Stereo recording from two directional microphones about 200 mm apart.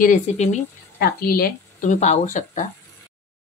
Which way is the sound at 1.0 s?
50° left (ahead or behind).